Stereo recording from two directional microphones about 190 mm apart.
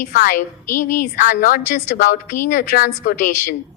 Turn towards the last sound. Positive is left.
turn(degrees=45)  # may be behind; listen again after turning